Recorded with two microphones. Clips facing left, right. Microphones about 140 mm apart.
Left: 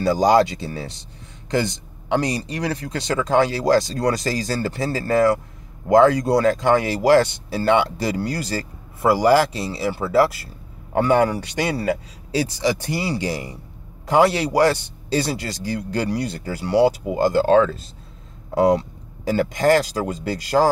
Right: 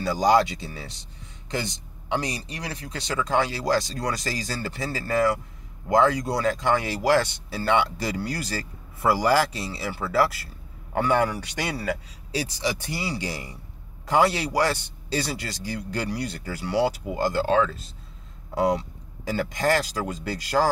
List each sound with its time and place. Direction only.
0.0 s speech: 35° left (ahead or behind)
16.8 s speech: 20° left (ahead or behind); by 17.7 s 40° left (ahead or behind)
19.2 s speech: 30° left (ahead or behind)